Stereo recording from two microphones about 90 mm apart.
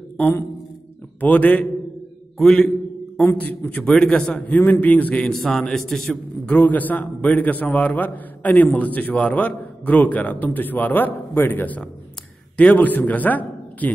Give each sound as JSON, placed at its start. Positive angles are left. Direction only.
{"t": 0.2, "sound": "a man's voice", "side_deg": 25}
{"t": 3.2, "sound": "a man's voice", "side_deg": 20}
{"t": 6.5, "sound": "a man's voice", "side_deg": 20}